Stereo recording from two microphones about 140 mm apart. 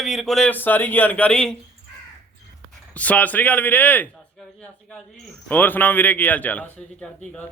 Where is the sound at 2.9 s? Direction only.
10° left (ahead or behind).